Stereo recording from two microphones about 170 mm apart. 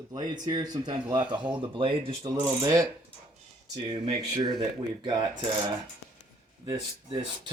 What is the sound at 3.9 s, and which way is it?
Speech, 30° right (ahead or behind).